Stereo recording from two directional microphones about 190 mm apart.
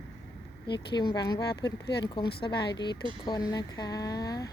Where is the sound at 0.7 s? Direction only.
25° left (ahead or behind).